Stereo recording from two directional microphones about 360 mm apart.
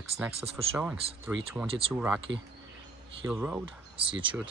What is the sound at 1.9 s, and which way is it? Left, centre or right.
Speech, centre.